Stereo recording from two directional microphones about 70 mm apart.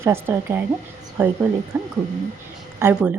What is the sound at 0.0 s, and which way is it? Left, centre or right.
Speech, right.